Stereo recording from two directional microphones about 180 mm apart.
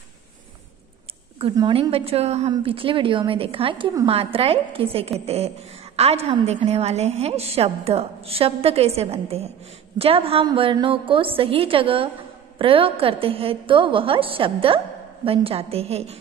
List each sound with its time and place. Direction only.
1.4 s a woman's voice: 30° right (ahead or behind)